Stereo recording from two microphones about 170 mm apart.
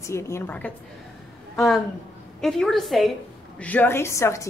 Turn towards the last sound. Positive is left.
turn(degrees=15)  # may be behind; listen again after turning